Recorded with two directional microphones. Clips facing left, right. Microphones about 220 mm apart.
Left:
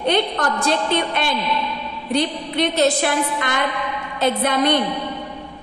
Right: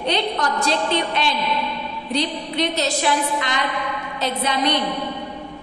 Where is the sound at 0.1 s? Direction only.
55° left (ahead or behind).